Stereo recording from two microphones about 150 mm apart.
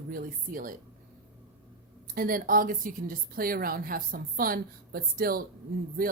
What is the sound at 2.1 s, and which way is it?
Speech, 70° right (ahead or behind).